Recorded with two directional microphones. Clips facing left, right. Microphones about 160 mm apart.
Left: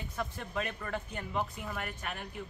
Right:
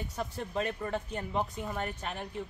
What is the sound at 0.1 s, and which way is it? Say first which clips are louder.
Speech: even; 30° right (ahead or behind).